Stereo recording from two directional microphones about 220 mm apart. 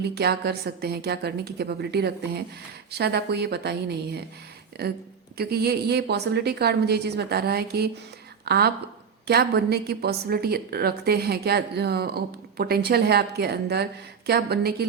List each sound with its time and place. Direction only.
0.0 s a woman's voice: 45° right (ahead or behind)
5.4 s a woman's voice: 45° right (ahead or behind)